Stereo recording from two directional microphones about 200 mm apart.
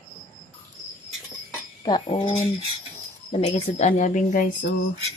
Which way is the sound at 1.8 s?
20° left (ahead or behind).